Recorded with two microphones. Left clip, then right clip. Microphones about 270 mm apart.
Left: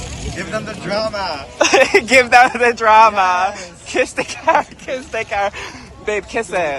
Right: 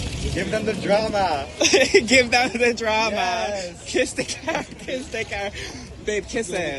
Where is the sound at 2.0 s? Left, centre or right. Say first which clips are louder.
Left 8 dB; centre.